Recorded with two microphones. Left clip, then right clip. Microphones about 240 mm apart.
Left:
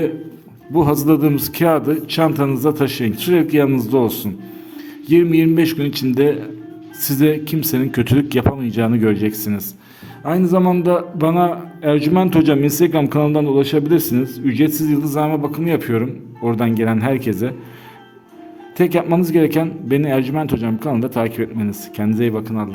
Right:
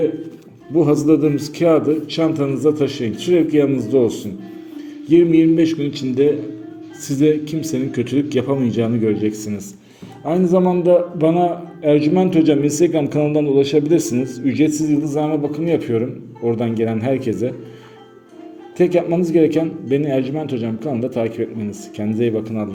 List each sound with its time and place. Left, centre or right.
0.8 s a man's voice: left
18.8 s a man's voice: left